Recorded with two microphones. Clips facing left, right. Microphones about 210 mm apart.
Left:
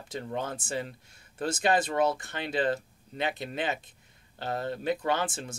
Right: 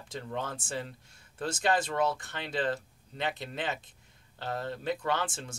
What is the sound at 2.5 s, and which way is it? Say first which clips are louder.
Speech: left 3 dB; 10° left (ahead or behind).